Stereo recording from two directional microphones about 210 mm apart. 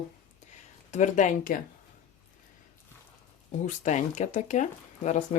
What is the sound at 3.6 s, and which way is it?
Speech, 35° left (ahead or behind).